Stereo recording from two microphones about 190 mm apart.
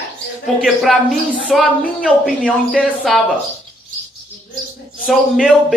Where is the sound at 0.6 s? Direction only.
Centre (ahead or behind).